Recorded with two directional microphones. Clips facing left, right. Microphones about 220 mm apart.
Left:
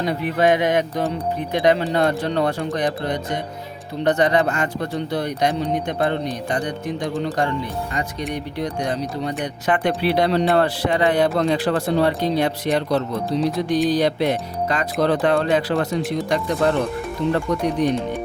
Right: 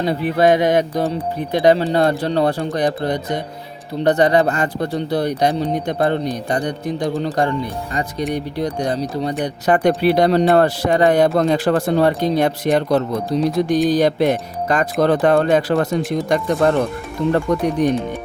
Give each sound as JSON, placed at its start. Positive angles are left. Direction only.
{"t": 0.0, "sound": "speech", "side_deg": -35}